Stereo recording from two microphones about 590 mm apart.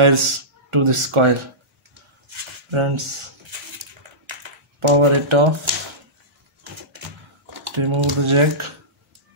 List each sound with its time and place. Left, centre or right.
0.0 s speech: right
4.3 s a sound: right
7.6 s speech: right